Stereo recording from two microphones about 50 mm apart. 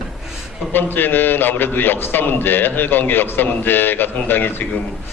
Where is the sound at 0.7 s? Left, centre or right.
Left.